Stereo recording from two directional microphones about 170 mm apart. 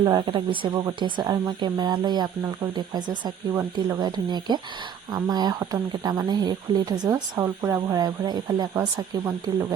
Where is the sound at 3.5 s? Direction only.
15° right (ahead or behind).